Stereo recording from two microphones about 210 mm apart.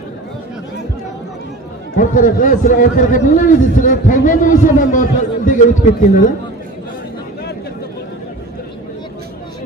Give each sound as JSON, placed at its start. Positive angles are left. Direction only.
{"t": 2.0, "sound": "a man's voice", "side_deg": 40}